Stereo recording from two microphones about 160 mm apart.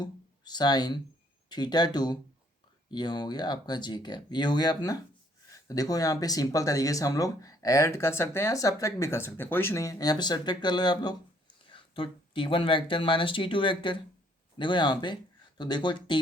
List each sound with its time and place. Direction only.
0.0 s speech: 25° left (ahead or behind)